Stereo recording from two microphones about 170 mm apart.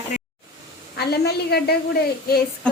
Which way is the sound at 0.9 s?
70° left (ahead or behind).